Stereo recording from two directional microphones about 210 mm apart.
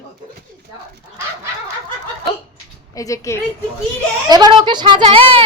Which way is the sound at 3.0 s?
15° left (ahead or behind).